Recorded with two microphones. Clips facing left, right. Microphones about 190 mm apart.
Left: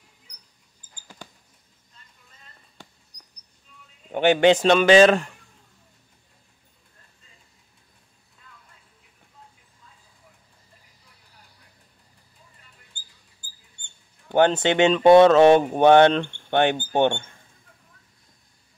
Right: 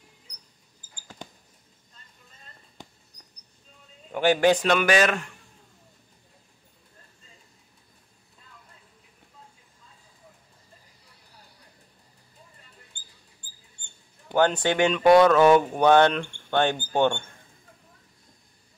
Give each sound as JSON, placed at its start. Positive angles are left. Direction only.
{"t": 4.1, "sound": "speech", "side_deg": 25}
{"t": 14.3, "sound": "speech", "side_deg": 20}